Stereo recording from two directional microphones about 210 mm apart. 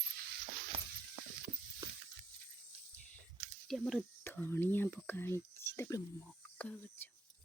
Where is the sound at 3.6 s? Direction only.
Centre (ahead or behind).